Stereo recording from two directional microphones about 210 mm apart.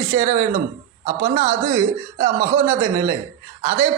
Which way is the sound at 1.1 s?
15° right (ahead or behind).